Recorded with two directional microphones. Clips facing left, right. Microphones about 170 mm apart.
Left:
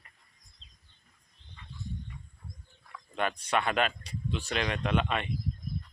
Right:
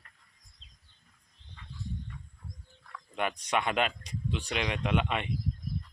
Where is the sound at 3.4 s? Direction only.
15° right (ahead or behind).